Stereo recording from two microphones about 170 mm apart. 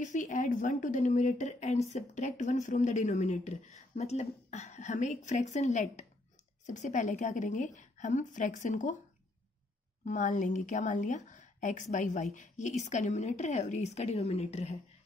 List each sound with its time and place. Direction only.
0.0 s a woman's voice: 45° left (ahead or behind)
10.0 s a woman's voice: 45° left (ahead or behind)